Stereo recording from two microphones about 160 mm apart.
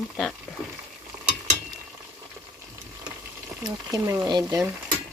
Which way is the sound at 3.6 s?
20° right (ahead or behind).